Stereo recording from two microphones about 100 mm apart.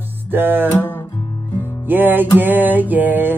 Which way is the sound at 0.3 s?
20° right (ahead or behind).